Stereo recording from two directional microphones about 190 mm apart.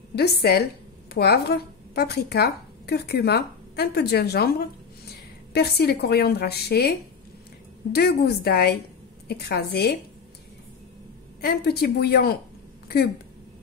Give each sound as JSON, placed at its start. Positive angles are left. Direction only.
{"t": 0.1, "sound": "speech", "side_deg": 55}
{"t": 11.4, "sound": "speech", "side_deg": 55}
{"t": 12.8, "sound": "a sound", "side_deg": 55}